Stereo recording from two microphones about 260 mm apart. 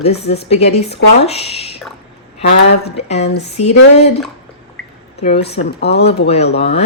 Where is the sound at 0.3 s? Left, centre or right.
Left.